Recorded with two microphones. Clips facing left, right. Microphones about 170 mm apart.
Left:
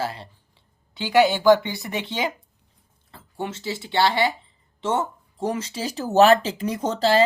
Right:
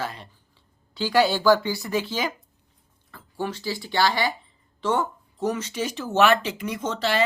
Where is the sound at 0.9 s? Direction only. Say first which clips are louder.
Left 2 dB; 20° left (ahead or behind).